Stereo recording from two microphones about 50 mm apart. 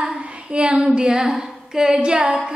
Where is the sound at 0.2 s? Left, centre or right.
Right.